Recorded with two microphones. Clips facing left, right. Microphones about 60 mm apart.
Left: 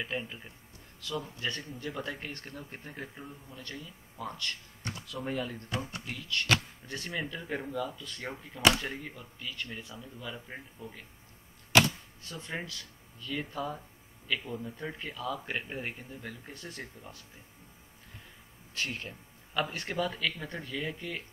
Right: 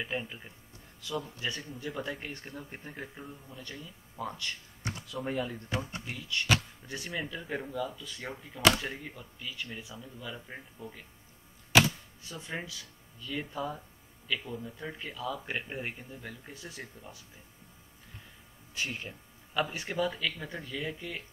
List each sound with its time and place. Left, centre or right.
0.0 s speech: centre
1.9 s speech: centre
4.2 s speech: centre
5.2 s speech: centre
7.1 s speech: centre
12.2 s speech: centre
16.5 s speech: centre
18.9 s speech: centre